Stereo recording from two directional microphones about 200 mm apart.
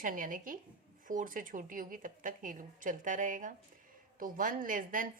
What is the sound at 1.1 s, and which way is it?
A woman's voice, 40° right (ahead or behind).